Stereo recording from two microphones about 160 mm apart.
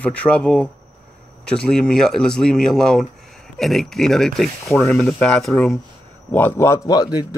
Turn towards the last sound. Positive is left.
turn(degrees=25)  # may be behind; listen again after turning